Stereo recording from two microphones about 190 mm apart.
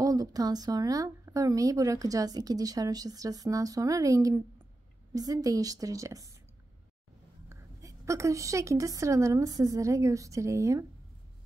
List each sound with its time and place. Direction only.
0.0 s speech: 20° right (ahead or behind)
7.4 s a woman's voice: 15° right (ahead or behind)